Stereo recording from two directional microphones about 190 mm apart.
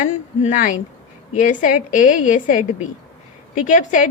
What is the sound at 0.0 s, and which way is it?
A woman's voice, 40° left (ahead or behind).